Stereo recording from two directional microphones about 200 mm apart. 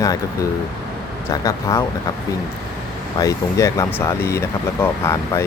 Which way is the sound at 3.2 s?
15° left (ahead or behind).